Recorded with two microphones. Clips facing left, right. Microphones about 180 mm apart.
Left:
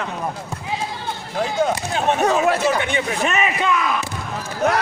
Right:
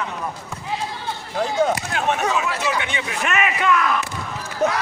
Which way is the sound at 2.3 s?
50° left (ahead or behind).